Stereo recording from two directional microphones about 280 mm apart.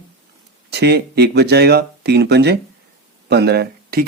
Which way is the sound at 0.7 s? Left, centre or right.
Right.